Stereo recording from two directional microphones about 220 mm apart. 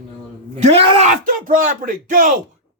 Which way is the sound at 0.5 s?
25° right (ahead or behind).